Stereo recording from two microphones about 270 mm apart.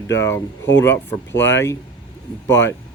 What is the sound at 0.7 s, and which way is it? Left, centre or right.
Speech, left.